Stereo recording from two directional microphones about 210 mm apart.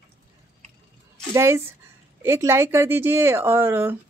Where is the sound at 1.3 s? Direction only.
10° right (ahead or behind).